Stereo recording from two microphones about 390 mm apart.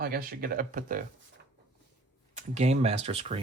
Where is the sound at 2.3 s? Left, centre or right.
Centre.